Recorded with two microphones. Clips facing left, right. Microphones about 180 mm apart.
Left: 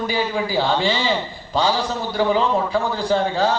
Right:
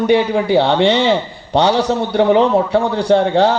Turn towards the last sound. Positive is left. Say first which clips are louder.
# right 7 dB
turn(degrees=-75)  # may be behind; listen again after turning